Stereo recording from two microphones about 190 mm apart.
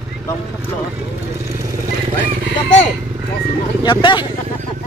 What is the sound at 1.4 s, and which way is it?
Vehicle, 15° right (ahead or behind).